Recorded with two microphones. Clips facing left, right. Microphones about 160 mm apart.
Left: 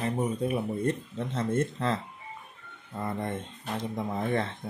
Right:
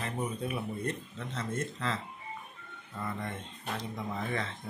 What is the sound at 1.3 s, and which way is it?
Speech, 55° left (ahead or behind).